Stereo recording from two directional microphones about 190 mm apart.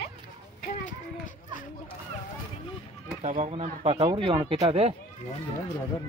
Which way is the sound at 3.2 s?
35° right (ahead or behind).